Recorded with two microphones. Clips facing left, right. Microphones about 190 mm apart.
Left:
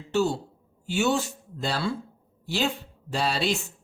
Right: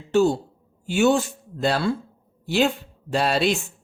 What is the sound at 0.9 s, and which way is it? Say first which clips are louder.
A man's voice: right 6 dB; 50° right (ahead or behind).